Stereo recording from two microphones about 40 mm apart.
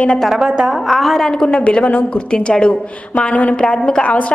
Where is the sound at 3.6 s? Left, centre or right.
Left.